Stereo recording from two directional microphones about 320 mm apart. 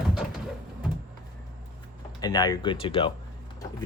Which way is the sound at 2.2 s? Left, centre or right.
Centre.